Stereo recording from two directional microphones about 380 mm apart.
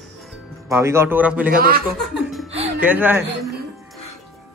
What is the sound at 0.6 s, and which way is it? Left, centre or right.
Speech, centre.